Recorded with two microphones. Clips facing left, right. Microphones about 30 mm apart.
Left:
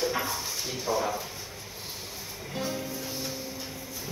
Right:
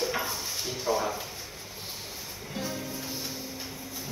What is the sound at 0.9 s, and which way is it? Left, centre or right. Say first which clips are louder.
Speech: right 1 dB; right.